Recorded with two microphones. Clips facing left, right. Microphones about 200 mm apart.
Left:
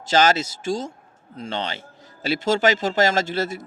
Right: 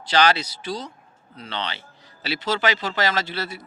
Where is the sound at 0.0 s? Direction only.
45° left (ahead or behind).